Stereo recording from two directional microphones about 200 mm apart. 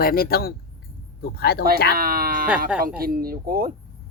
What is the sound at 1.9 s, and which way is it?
Speech, 50° right (ahead or behind).